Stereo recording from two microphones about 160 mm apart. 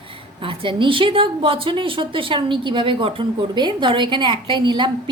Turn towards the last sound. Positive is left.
turn(degrees=-30)  # may be behind; listen again after turning